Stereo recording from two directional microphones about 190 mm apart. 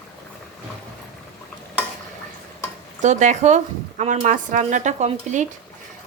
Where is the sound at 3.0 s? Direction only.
40° right (ahead or behind).